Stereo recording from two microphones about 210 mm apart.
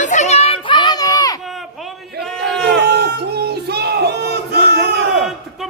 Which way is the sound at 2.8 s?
50° right (ahead or behind).